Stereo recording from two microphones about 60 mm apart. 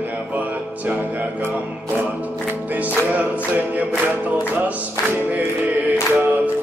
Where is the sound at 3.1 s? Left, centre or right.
Right.